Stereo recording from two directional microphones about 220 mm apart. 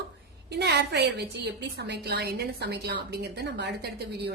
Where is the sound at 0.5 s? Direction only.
50° right (ahead or behind).